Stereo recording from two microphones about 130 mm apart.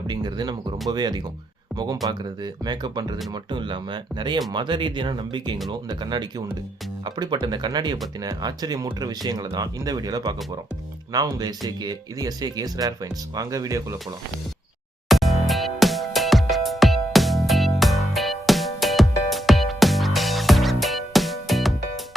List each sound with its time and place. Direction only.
0.1 s speech: 35° right (ahead or behind)
15.1 s music: centre (ahead or behind)